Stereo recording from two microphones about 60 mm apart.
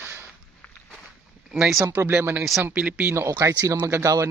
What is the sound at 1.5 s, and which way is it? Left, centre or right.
Speech, centre.